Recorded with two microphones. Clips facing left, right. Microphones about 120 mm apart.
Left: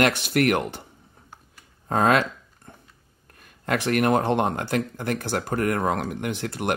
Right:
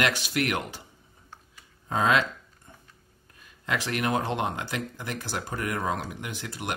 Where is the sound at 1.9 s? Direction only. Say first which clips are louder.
Left 4 dB; 50° left (ahead or behind).